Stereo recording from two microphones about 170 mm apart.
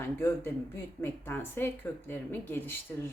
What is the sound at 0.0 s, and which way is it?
A woman's voice, 15° left (ahead or behind).